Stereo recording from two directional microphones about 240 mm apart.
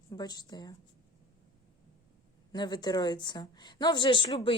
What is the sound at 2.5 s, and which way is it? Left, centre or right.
A woman's voice, centre.